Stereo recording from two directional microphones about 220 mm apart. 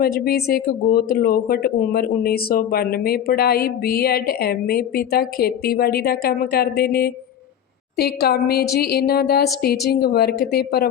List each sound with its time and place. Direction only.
0.0 s speech: 45° left (ahead or behind)